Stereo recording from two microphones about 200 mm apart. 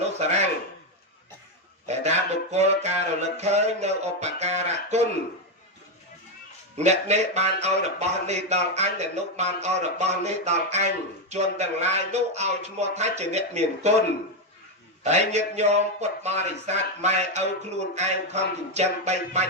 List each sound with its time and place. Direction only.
0.0 s speech: 35° right (ahead or behind)
1.9 s speech: 35° right (ahead or behind)
6.7 s speech: 35° right (ahead or behind)
15.0 s speech: 35° right (ahead or behind)